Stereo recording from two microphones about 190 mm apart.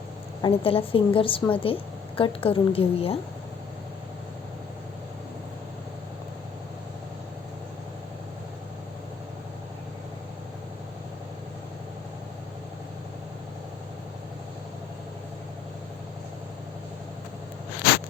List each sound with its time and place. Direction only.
0.4 s a woman's voice: 30° left (ahead or behind)